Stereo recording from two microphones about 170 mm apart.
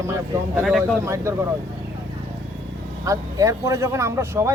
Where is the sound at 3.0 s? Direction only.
20° right (ahead or behind).